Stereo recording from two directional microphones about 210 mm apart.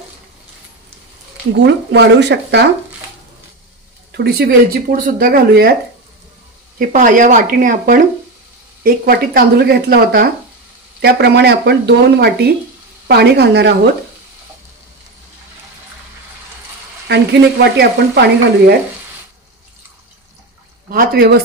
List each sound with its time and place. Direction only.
1.7 s speech: 55° right (ahead or behind)
4.1 s speech: 50° right (ahead or behind)
6.8 s speech: 40° right (ahead or behind)
17.1 s speech: 55° right (ahead or behind)
20.9 s speech: 45° right (ahead or behind)